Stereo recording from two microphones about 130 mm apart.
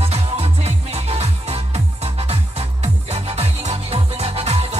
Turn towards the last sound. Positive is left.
turn(degrees=-50)  # may be behind; listen again after turning